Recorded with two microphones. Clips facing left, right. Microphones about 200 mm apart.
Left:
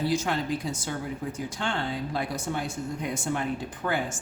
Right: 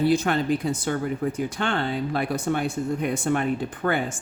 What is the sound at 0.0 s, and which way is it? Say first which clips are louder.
Speech: right 6 dB; 60° right (ahead or behind).